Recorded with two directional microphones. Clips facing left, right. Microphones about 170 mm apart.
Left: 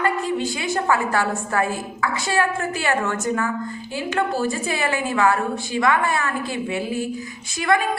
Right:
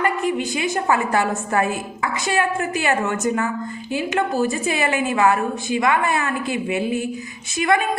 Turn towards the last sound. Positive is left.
turn(degrees=-20)  # may be behind; listen again after turning